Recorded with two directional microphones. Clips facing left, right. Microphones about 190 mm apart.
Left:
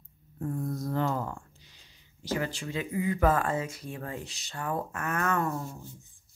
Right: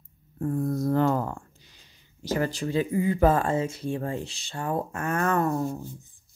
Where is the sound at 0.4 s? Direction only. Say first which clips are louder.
Right 6 dB; 55° right (ahead or behind).